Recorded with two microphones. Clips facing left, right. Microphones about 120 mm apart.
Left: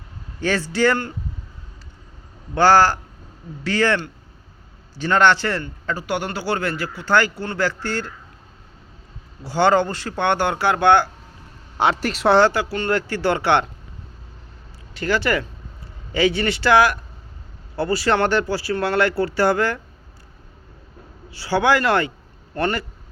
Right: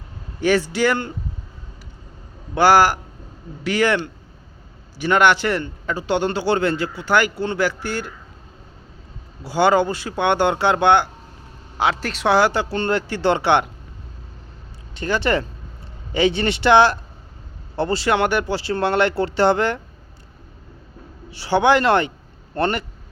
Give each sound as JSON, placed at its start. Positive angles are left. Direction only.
{"t": 0.3, "sound": "a man's voice", "side_deg": -15}
{"t": 2.6, "sound": "a man's voice", "side_deg": -10}
{"t": 9.4, "sound": "a man's voice", "side_deg": -15}
{"t": 11.8, "sound": "speech", "side_deg": 0}
{"t": 12.4, "sound": "speech", "side_deg": -20}
{"t": 14.9, "sound": "speech", "side_deg": -20}
{"t": 21.3, "sound": "speech", "side_deg": -20}